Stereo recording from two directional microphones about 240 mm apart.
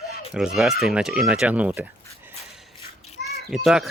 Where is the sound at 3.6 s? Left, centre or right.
Centre.